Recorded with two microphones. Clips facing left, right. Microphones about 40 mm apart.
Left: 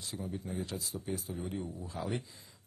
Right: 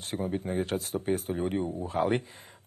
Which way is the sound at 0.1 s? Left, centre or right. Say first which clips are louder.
Right 10 dB; right.